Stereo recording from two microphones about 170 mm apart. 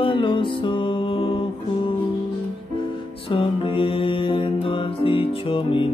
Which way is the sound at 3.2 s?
30° left (ahead or behind).